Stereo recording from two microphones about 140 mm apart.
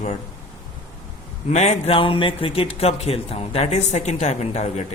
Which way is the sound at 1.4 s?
50° left (ahead or behind).